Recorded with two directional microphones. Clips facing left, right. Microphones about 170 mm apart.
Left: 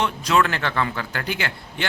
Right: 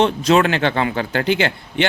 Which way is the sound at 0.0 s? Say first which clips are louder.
Right 6 dB; 25° right (ahead or behind).